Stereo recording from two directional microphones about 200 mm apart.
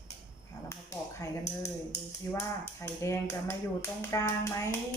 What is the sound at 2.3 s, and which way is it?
Speech, 15° left (ahead or behind).